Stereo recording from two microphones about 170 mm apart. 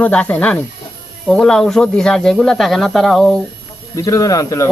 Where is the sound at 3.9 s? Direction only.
20° left (ahead or behind).